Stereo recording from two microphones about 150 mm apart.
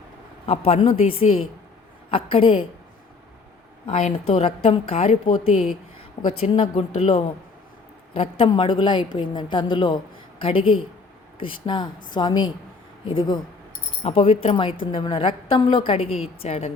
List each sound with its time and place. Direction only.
0.4 s a woman's voice: 40° left (ahead or behind)
3.8 s a woman's voice: 40° left (ahead or behind)
16.0 s a woman's voice: centre (ahead or behind)
16.4 s a woman's voice: 40° left (ahead or behind)